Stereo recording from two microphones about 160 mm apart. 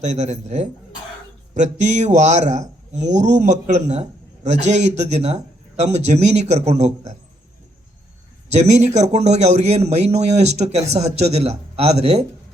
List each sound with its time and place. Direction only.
0.0 s a man's voice: 45° right (ahead or behind)
8.5 s a man's voice: 45° right (ahead or behind)